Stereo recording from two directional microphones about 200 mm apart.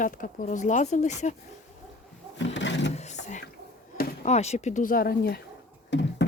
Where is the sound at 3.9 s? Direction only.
40° left (ahead or behind).